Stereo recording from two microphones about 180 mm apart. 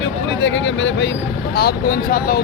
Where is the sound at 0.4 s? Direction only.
90° left.